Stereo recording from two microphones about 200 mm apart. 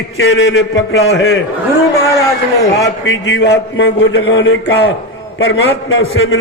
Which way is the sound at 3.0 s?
70° left (ahead or behind).